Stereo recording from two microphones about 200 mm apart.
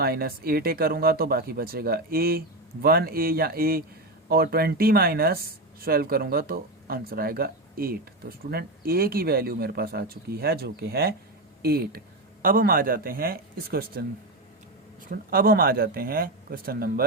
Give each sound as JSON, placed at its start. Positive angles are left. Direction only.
{"t": 0.0, "sound": "speech", "side_deg": -50}
{"t": 15.1, "sound": "speech", "side_deg": -50}